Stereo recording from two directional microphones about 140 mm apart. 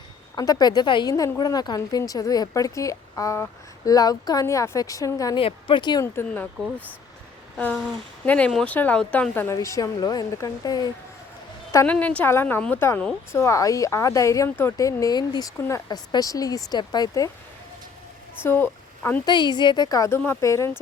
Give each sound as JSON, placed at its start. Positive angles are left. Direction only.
{"t": 0.3, "sound": "a woman's voice", "side_deg": 25}
{"t": 5.4, "sound": "a woman's voice", "side_deg": 40}
{"t": 6.1, "sound": "speech", "side_deg": 10}
{"t": 6.6, "sound": "speech", "side_deg": -10}
{"t": 8.2, "sound": "speech", "side_deg": 10}
{"t": 11.9, "sound": "a woman's voice", "side_deg": 10}
{"t": 18.4, "sound": "speech", "side_deg": 15}
{"t": 19.2, "sound": "a woman's voice", "side_deg": 35}